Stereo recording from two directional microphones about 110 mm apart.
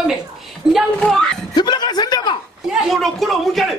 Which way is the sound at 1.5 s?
40° left (ahead or behind).